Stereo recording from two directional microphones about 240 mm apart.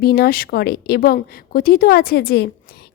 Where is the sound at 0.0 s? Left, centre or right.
Left.